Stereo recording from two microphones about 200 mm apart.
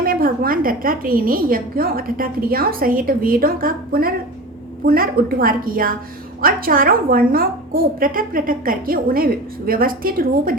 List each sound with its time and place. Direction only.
0.0 s a woman's voice: 45° right (ahead or behind)